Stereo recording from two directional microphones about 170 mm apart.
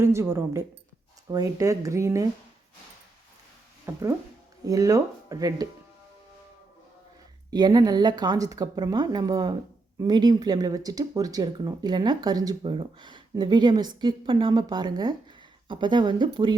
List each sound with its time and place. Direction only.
0.0 s speech: 15° right (ahead or behind)
3.9 s speech: 15° right (ahead or behind)
7.5 s speech: 25° right (ahead or behind)